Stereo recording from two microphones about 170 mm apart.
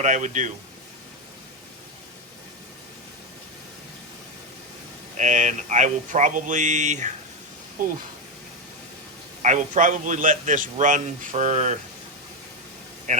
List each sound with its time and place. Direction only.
0.0 s a man's voice: 45° right (ahead or behind)
5.1 s a man's voice: 45° right (ahead or behind)
9.4 s a man's voice: 45° right (ahead or behind)
13.1 s speech: 45° right (ahead or behind)